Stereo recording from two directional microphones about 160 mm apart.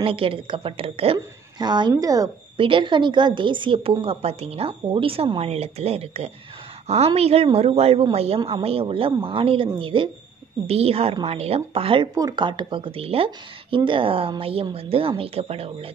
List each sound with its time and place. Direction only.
0.0 s a woman's voice: 35° right (ahead or behind)